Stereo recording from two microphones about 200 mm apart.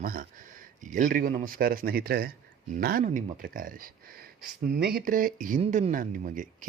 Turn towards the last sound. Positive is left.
turn(degrees=-40)  # may be behind; listen again after turning